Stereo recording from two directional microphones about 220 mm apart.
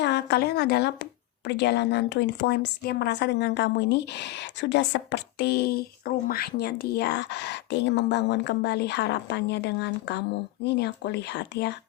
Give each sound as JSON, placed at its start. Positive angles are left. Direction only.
{"t": 0.0, "sound": "a woman's voice", "side_deg": 50}